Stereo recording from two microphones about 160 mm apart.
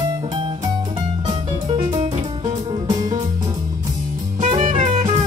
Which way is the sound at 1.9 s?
35° right (ahead or behind).